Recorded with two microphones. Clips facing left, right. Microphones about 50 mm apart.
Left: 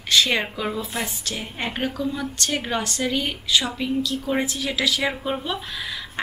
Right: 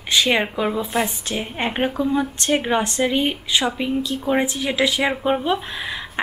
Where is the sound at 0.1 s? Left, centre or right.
Centre.